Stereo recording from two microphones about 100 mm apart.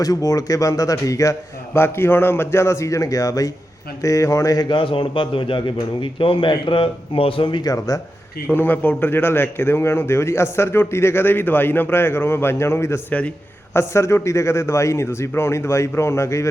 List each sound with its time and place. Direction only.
0.0 s a man's voice: 35° left (ahead or behind)
4.7 s a man's voice: 60° left (ahead or behind)
7.6 s a man's voice: 35° left (ahead or behind)
8.4 s a man's voice: 20° left (ahead or behind)